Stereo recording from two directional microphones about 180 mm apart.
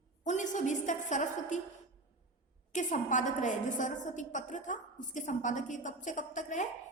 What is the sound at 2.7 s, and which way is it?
A woman's voice, 45° left (ahead or behind).